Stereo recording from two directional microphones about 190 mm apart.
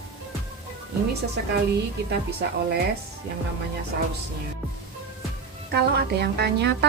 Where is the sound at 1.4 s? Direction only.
65° right (ahead or behind).